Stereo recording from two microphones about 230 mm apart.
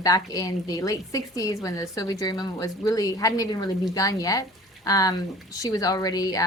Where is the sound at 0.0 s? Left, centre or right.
Centre.